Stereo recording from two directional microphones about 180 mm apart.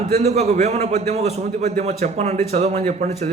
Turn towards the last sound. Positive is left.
turn(degrees=-35)  # may be behind; listen again after turning